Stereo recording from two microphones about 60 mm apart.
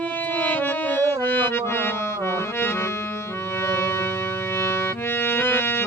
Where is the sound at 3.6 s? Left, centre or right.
Left.